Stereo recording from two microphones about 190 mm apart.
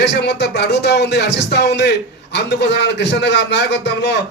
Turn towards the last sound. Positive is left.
turn(degrees=65)  # may be behind; listen again after turning